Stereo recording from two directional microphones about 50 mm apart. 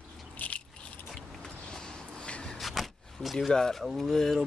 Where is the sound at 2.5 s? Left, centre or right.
Centre.